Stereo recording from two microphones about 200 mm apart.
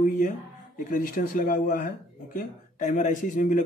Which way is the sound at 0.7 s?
40° left (ahead or behind).